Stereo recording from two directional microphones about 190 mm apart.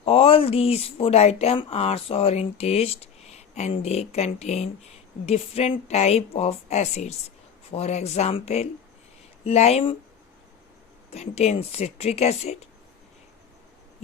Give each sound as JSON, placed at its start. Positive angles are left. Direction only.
{"t": 0.0, "sound": "speech", "side_deg": 30}
{"t": 11.1, "sound": "speech", "side_deg": 35}